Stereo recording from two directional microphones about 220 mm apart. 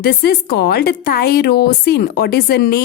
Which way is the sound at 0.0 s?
45° left (ahead or behind).